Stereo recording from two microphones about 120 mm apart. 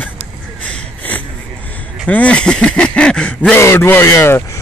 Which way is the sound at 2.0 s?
10° left (ahead or behind).